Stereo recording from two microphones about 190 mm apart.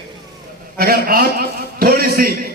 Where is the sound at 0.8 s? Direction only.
50° right (ahead or behind).